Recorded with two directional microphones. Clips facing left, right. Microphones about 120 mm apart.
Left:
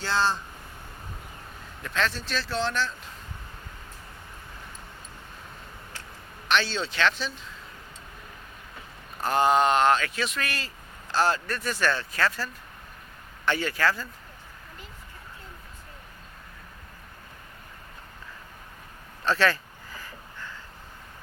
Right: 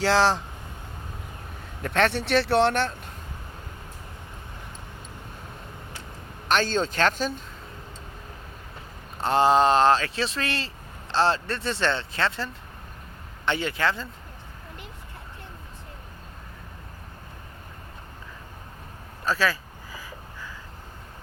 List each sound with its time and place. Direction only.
0.0 s speech: 90° right
1.8 s speech: 60° right (ahead or behind)
6.5 s speech: 45° right (ahead or behind)
9.1 s speech: 30° right (ahead or behind)
19.2 s a sound: 5° right (ahead or behind)